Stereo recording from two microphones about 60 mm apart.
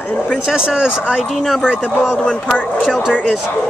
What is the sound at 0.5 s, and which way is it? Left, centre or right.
Speech, centre.